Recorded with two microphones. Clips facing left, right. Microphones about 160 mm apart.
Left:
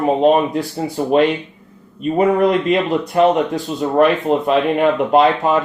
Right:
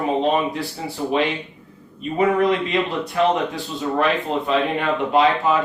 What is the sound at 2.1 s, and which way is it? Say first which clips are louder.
Speech: left 4 dB; 50° left (ahead or behind).